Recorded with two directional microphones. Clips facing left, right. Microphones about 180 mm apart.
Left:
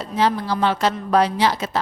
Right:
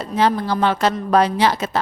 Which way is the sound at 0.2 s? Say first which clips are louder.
Right 2 dB; 50° right (ahead or behind).